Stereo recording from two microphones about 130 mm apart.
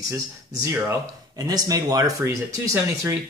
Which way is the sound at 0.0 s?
25° right (ahead or behind).